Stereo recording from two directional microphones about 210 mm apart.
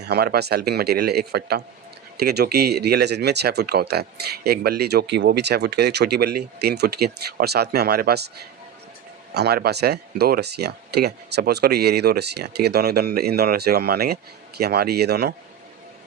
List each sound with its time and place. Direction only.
0.0 s speech: 50° right (ahead or behind)
9.3 s speech: 50° right (ahead or behind)